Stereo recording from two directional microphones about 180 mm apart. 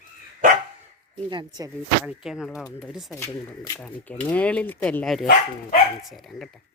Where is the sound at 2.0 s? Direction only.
Centre (ahead or behind).